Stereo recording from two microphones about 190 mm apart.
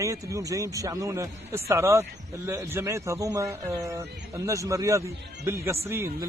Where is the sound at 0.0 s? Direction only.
15° right (ahead or behind).